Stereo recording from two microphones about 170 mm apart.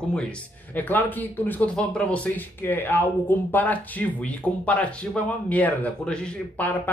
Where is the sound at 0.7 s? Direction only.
10° left (ahead or behind).